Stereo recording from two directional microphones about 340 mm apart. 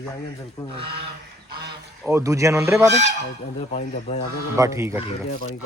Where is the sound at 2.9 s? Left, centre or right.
Right.